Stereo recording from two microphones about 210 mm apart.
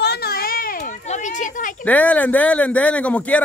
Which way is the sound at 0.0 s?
50° left (ahead or behind).